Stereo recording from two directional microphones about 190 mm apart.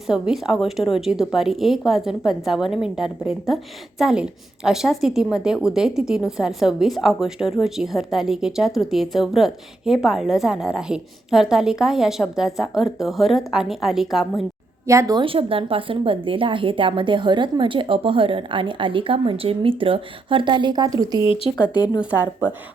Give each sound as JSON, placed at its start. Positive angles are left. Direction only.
{"t": 0.1, "sound": "a woman's voice", "side_deg": -5}
{"t": 14.8, "sound": "a woman's voice", "side_deg": -15}
{"t": 21.8, "sound": "speech", "side_deg": 20}